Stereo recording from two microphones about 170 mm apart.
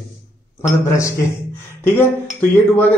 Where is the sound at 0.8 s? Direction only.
20° left (ahead or behind).